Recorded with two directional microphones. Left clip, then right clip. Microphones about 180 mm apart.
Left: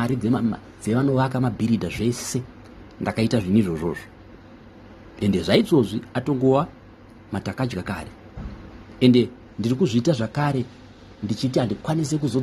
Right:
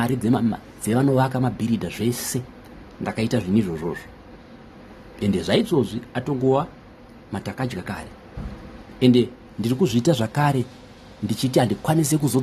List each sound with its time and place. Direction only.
0.0 s speech: centre (ahead or behind)
1.3 s a man's voice: 10° left (ahead or behind)
5.2 s speech: 15° left (ahead or behind); by 12.4 s 10° right (ahead or behind)